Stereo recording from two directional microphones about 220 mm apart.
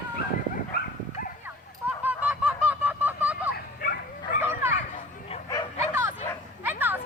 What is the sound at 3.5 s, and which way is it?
Dog, 40° left (ahead or behind).